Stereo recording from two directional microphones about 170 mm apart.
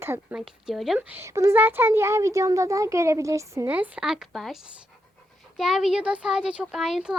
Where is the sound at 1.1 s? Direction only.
15° right (ahead or behind); by 4.6 s centre (ahead or behind).